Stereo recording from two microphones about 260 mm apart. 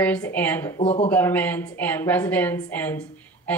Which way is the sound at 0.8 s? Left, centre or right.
Left.